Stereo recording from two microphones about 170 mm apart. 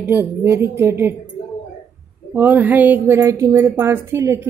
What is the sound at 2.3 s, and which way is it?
Speech, 10° right (ahead or behind).